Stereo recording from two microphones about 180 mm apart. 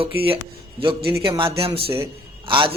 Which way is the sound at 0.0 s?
30° right (ahead or behind).